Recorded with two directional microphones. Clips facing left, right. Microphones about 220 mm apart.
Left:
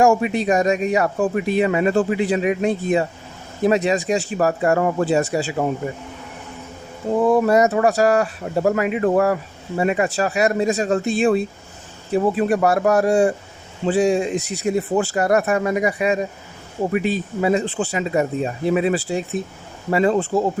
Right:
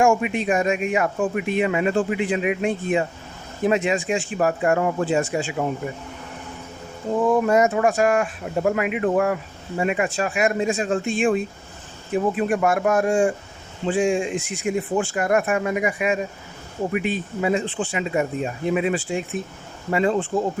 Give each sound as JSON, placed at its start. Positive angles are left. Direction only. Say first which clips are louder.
{"t": 0.0, "sound": "speech", "louder": "left 3 dB", "side_deg": 35}
{"t": 7.1, "sound": "speech", "louder": "left 3 dB", "side_deg": 35}